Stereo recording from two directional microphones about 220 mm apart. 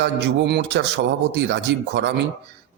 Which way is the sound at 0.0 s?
50° right (ahead or behind).